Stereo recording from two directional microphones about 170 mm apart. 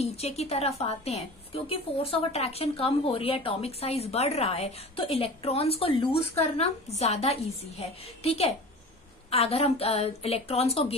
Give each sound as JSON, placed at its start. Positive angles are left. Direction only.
{"t": 0.0, "sound": "a woman's voice", "side_deg": 40}